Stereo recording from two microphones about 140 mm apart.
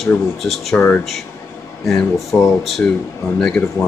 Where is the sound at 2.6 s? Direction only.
Centre (ahead or behind).